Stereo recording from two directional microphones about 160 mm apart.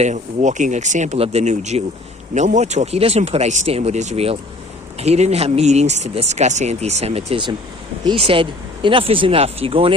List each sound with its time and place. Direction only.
0.0 s speech: 50° right (ahead or behind)